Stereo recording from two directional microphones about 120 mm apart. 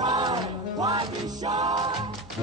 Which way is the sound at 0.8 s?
35° right (ahead or behind).